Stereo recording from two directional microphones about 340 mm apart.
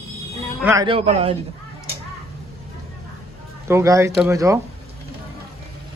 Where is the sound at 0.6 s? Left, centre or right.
Centre.